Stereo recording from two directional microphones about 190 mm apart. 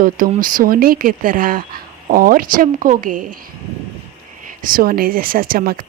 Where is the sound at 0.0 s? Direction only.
45° right (ahead or behind).